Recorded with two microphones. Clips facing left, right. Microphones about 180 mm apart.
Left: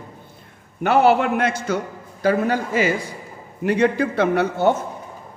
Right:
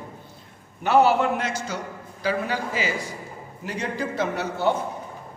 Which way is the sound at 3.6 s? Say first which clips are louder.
Left 11 dB; 60° left (ahead or behind).